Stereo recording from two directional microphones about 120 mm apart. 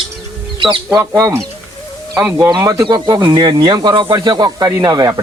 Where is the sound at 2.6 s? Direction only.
25° right (ahead or behind).